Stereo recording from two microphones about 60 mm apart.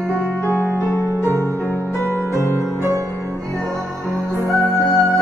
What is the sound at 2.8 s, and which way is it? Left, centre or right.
Music, right.